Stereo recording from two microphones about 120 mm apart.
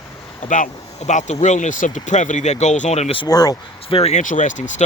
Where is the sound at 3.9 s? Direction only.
55° left (ahead or behind); by 4.8 s 90° left.